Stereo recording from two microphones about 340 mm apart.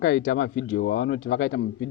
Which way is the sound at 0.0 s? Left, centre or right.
Left.